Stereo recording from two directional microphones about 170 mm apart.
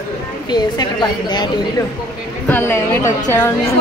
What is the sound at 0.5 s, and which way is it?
Speech, 25° left (ahead or behind).